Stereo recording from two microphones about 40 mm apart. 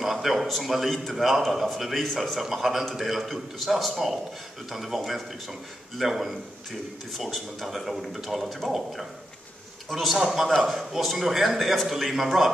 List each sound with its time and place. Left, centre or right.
0.0 s a sound: centre
0.5 s a man's voice: centre
0.8 s a man's voice: centre
1.1 s a man's voice: centre
3.3 s a man's voice: centre